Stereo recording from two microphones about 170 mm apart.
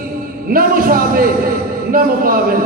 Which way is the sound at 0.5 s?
55° right (ahead or behind).